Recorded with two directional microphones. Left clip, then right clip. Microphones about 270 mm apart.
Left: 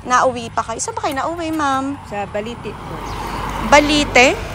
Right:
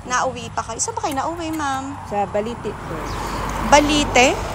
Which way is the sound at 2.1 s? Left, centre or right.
Right.